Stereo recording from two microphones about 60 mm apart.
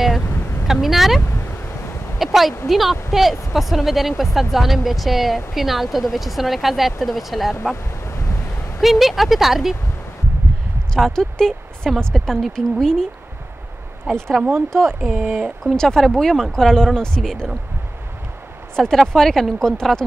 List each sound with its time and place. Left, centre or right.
0.7 s a woman's voice: centre
8.8 s speech: centre
11.0 s speech: centre
14.1 s speech: centre
15.1 s speech: centre
15.6 s speech: centre
18.8 s speech: centre